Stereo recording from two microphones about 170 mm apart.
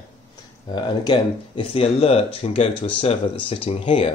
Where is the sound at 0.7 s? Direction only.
25° left (ahead or behind).